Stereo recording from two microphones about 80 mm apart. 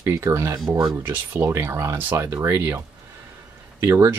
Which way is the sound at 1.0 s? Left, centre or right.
Right.